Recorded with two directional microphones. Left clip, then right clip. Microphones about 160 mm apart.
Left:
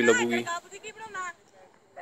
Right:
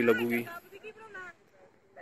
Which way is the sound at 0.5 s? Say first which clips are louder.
Left 9 dB; 40° right (ahead or behind).